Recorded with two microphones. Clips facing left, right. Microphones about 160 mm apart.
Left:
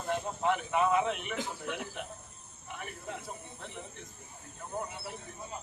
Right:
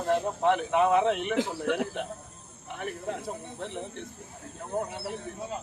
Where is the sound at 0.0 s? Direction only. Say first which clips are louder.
Right 7 dB; 70° right (ahead or behind).